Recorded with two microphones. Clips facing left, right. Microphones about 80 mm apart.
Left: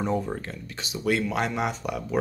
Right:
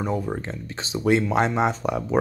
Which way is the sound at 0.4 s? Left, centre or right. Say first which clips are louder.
Right 4 dB; right.